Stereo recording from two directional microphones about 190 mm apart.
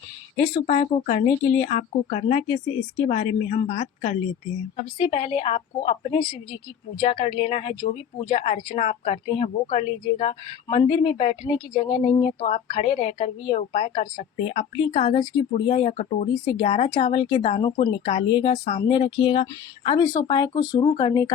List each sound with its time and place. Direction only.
0.3 s a woman's voice: 35° left (ahead or behind)
18.8 s speech: 25° left (ahead or behind)